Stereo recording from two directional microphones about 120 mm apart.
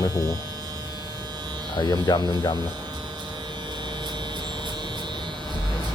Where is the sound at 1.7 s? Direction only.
35° left (ahead or behind).